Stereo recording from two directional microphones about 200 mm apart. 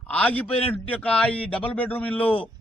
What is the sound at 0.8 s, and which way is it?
A man's voice, 10° left (ahead or behind).